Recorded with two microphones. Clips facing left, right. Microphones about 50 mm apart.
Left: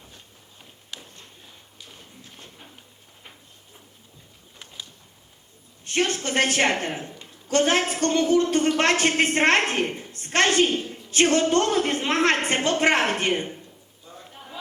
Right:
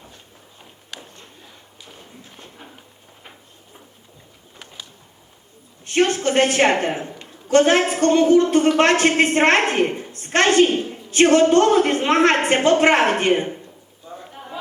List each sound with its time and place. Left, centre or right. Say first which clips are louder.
2.0 s walk: right 4 dB; centre
5.9 s a woman's voice: right 6 dB; right
14.2 s a sound: right 5 dB; centre